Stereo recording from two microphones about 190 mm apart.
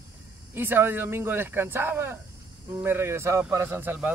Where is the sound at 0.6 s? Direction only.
10° right (ahead or behind).